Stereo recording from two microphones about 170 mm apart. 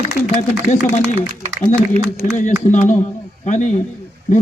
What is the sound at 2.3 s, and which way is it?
Speech, 45° left (ahead or behind).